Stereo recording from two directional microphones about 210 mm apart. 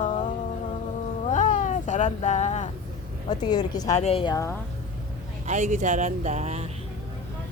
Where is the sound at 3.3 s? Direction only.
20° left (ahead or behind).